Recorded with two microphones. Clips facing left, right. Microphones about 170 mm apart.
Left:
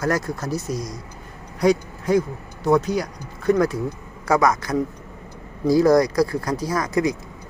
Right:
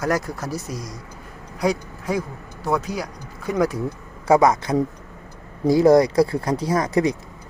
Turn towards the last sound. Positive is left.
turn(degrees=-30)  # may be behind; listen again after turning